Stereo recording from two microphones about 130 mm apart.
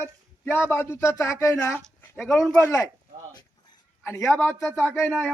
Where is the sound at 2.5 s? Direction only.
25° left (ahead or behind).